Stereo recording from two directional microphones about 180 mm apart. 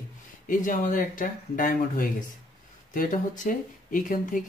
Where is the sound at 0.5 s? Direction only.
45° left (ahead or behind).